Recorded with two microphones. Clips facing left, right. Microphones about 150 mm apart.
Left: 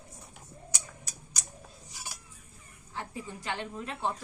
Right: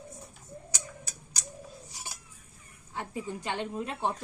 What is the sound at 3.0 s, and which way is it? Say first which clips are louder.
A woman's voice: right 4 dB; 20° right (ahead or behind).